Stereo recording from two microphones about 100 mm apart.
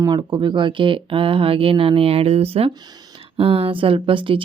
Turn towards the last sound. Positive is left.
turn(degrees=-60)  # may be behind; listen again after turning